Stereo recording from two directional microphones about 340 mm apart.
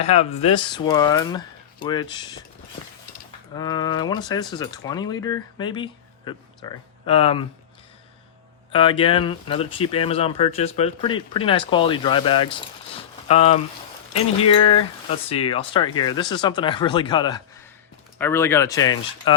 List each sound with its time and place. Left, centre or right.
0.0 s speech: centre
3.5 s speech: centre
8.7 s speech: centre